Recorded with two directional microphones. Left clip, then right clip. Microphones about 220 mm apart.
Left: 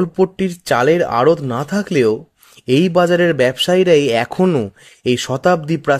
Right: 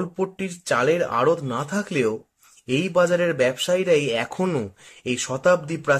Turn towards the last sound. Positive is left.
turn(degrees=40)  # may be behind; listen again after turning